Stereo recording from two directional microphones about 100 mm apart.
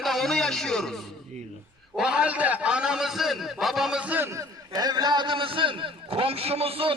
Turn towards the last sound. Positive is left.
turn(degrees=-70)  # may be behind; listen again after turning